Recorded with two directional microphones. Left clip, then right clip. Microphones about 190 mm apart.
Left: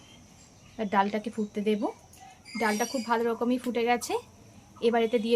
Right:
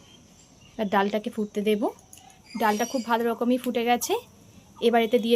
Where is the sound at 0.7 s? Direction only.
35° right (ahead or behind).